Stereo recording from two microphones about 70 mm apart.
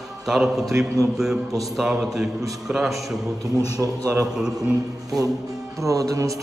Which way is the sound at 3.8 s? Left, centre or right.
Right.